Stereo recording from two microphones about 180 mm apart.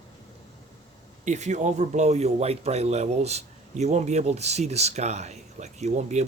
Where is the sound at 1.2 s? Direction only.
40° right (ahead or behind).